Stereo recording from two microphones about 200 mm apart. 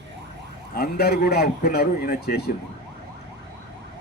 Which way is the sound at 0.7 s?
50° left (ahead or behind).